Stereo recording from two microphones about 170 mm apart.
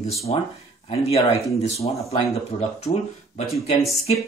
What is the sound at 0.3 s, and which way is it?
Speech, 35° left (ahead or behind).